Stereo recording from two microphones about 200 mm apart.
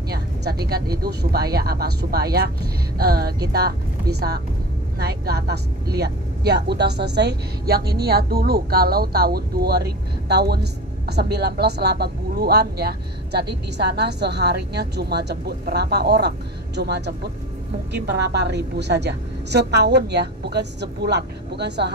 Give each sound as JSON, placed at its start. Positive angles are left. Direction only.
{"t": 0.1, "sound": "a woman's voice", "side_deg": -50}